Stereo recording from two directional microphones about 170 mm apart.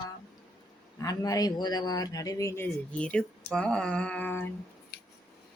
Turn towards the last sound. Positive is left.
turn(degrees=70)  # may be behind; listen again after turning